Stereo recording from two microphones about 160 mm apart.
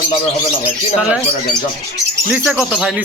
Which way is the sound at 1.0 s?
5° right (ahead or behind).